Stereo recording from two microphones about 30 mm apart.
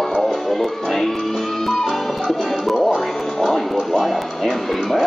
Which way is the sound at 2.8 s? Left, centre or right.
Centre.